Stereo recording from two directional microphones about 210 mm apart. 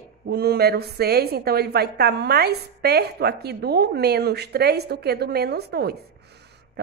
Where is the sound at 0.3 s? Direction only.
50° right (ahead or behind).